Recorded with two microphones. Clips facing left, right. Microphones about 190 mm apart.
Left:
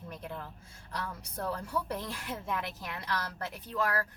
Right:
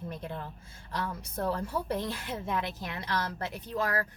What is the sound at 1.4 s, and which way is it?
Speech, 45° right (ahead or behind).